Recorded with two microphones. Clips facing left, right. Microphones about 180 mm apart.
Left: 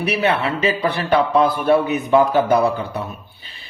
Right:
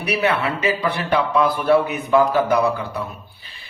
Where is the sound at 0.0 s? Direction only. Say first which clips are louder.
Left 1 dB; 25° left (ahead or behind).